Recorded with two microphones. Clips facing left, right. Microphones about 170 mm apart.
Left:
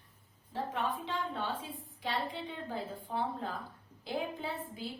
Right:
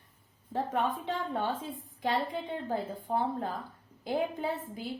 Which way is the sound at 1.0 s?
50° right (ahead or behind).